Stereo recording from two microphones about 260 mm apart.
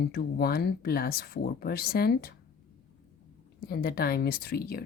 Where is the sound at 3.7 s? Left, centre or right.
Left.